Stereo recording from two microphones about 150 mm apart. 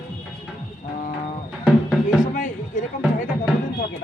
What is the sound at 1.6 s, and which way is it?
Music, centre (ahead or behind).